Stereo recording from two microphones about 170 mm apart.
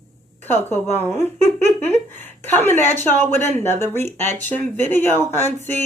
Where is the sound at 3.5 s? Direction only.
40° right (ahead or behind).